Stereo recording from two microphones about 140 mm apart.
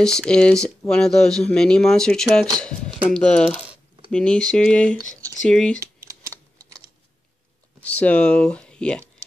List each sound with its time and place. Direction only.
0.0 s speech: 5° left (ahead or behind)
4.9 s speech: 25° right (ahead or behind)
5.4 s speech: 5° left (ahead or behind)
6.0 s typewriter: 25° right (ahead or behind)
7.8 s speech: 10° left (ahead or behind)